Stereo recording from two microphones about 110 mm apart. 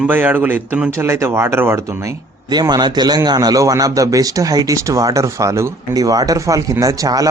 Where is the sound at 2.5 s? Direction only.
40° right (ahead or behind).